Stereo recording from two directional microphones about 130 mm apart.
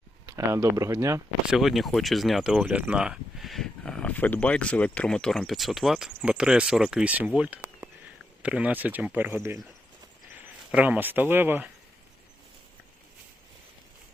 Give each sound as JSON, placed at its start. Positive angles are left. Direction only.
{"t": 0.3, "sound": "speech", "side_deg": -25}
{"t": 1.5, "sound": "speech", "side_deg": 0}
{"t": 10.7, "sound": "speech", "side_deg": -10}